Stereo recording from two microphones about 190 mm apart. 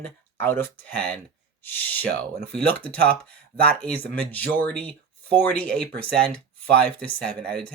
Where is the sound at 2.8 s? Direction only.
5° left (ahead or behind).